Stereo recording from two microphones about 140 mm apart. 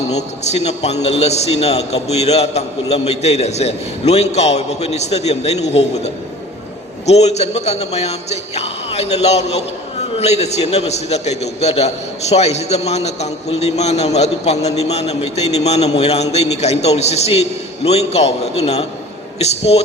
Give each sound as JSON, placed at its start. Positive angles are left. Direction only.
{"t": 0.1, "sound": "a man's voice", "side_deg": 50}